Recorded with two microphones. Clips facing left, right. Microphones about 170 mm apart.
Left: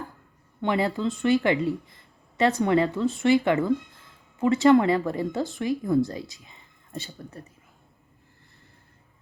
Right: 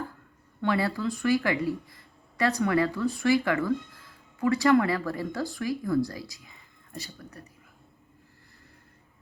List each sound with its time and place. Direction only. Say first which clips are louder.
0.6 s speech: left 2 dB; 20° left (ahead or behind)